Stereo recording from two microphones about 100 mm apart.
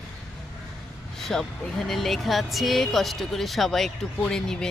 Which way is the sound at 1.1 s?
5° left (ahead or behind).